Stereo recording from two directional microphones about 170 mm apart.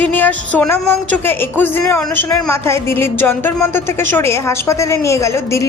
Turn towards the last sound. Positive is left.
turn(degrees=15)  # may be behind; listen again after turning